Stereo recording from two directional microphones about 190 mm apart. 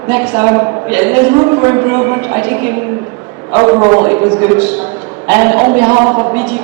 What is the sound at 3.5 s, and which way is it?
Speech, 30° right (ahead or behind).